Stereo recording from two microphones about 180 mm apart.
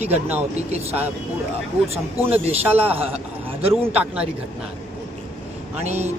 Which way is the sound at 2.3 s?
35° right (ahead or behind).